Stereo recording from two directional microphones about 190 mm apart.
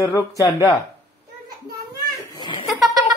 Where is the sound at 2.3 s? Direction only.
25° left (ahead or behind).